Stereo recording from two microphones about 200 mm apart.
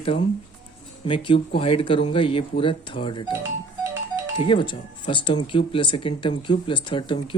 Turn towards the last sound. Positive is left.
turn(degrees=25)  # may be behind; listen again after turning